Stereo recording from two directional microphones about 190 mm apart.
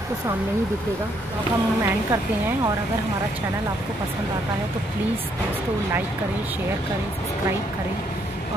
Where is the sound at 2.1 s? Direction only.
10° right (ahead or behind).